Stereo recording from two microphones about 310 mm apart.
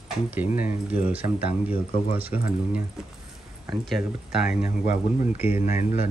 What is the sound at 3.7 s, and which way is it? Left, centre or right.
Speech, centre.